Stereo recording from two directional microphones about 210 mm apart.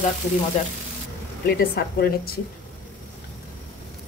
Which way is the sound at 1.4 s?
45° left (ahead or behind).